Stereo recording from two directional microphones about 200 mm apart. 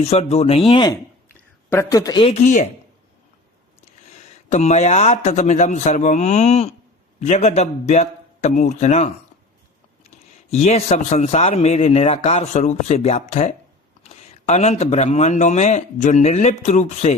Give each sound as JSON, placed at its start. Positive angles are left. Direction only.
{"t": 0.0, "sound": "speech", "side_deg": 30}
{"t": 2.4, "sound": "speech", "side_deg": 40}
{"t": 4.2, "sound": "speech", "side_deg": 35}
{"t": 10.5, "sound": "speech", "side_deg": 30}